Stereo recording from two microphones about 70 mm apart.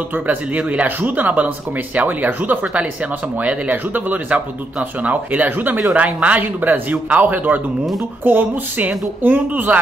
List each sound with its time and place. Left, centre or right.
0.1 s speech: right